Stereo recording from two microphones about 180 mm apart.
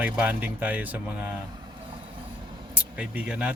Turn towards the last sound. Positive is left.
turn(degrees=-5)  # may be behind; listen again after turning